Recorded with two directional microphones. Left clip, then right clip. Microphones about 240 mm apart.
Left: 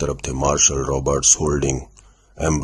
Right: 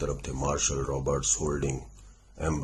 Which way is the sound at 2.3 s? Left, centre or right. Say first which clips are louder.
Left 10 dB; left.